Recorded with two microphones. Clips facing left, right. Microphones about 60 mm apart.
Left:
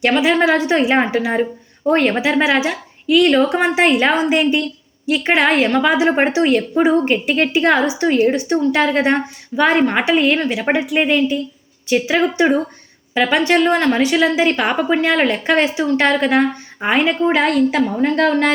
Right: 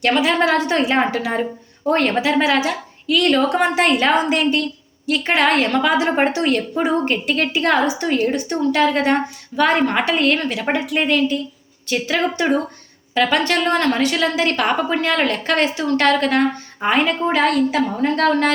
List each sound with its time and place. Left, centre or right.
0.0 s a woman's voice: centre